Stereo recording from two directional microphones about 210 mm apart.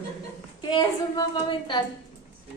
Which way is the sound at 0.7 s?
20° left (ahead or behind).